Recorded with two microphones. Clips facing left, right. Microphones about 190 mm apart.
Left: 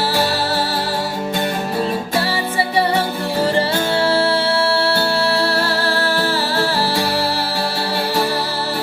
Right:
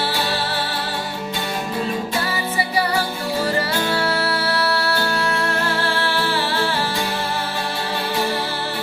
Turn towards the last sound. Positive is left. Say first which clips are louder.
# left 3 dB
turn(degrees=40)  # may be behind; listen again after turning